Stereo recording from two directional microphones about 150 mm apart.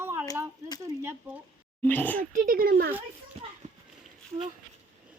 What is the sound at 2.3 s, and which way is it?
Oink, 70° right (ahead or behind).